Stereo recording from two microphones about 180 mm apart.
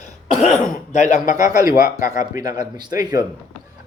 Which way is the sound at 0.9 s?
45° left (ahead or behind).